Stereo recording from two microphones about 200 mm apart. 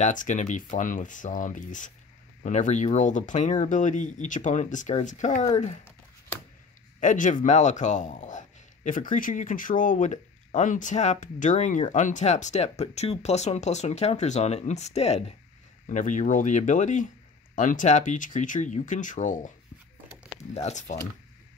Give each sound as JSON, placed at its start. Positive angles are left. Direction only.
{"t": 0.0, "sound": "speech", "side_deg": 40}
{"t": 7.0, "sound": "speech", "side_deg": 40}
{"t": 20.5, "sound": "speech", "side_deg": 35}